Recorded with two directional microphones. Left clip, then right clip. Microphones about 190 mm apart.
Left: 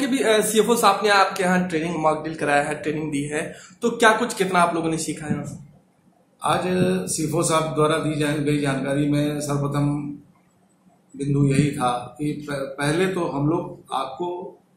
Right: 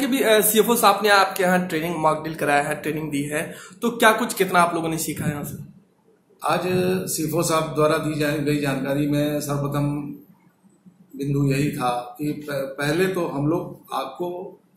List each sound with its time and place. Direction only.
0.0 s speech: 20° right (ahead or behind)
6.4 s speech: 5° left (ahead or behind)
11.1 s speech: centre (ahead or behind)